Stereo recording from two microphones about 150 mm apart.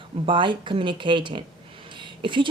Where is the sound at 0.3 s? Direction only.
35° right (ahead or behind).